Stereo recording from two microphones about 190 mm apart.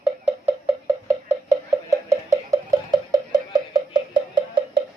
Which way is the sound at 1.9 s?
15° right (ahead or behind).